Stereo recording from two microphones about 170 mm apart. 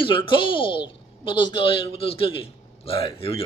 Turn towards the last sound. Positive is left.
turn(degrees=30)  # may be behind; listen again after turning